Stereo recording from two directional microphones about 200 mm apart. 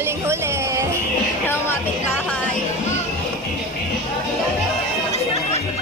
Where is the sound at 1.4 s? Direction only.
10° left (ahead or behind).